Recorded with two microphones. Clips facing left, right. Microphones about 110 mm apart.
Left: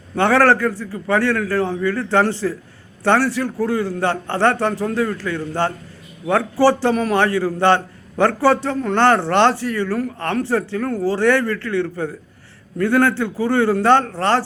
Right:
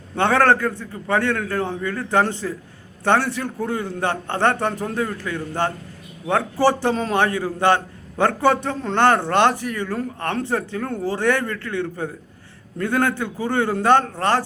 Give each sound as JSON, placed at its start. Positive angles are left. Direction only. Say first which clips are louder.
{"t": 0.2, "sound": "a man's voice", "louder": "left 2 dB", "side_deg": -20}